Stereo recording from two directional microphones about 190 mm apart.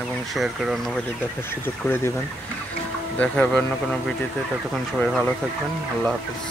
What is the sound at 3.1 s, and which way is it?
Speech, 5° left (ahead or behind).